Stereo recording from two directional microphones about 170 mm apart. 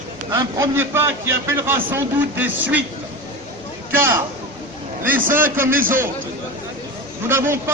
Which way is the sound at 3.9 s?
15° right (ahead or behind).